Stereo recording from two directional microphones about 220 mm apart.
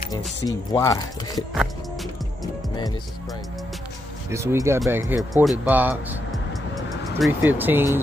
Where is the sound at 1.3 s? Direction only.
Centre (ahead or behind).